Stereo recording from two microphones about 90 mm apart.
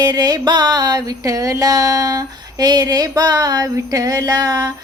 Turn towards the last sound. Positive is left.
turn(degrees=-45)  # may be behind; listen again after turning